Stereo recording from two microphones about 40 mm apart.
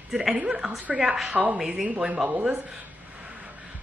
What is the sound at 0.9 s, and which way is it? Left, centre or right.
Speech, centre.